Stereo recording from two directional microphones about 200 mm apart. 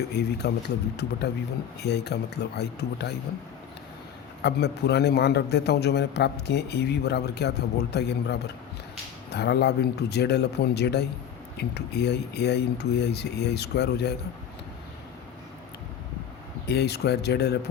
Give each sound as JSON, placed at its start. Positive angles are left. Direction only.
{"t": 0.1, "sound": "a man's voice", "side_deg": 55}
{"t": 1.8, "sound": "a man's voice", "side_deg": 55}
{"t": 4.4, "sound": "a man's voice", "side_deg": 55}
{"t": 16.6, "sound": "a man's voice", "side_deg": 55}